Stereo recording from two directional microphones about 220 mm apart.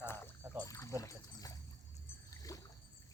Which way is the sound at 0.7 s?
15° left (ahead or behind).